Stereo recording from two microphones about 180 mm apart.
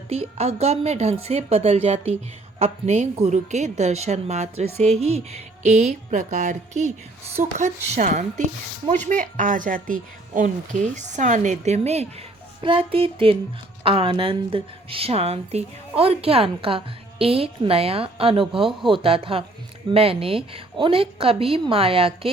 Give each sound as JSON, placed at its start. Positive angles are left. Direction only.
{"t": 0.1, "sound": "a woman's voice", "side_deg": -35}